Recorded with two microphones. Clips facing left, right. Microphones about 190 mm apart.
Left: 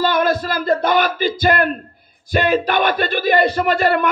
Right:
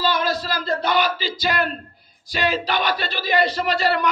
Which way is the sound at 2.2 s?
55° left (ahead or behind).